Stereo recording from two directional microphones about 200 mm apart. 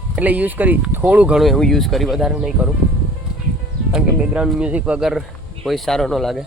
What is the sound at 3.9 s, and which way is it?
Speech, 5° right (ahead or behind).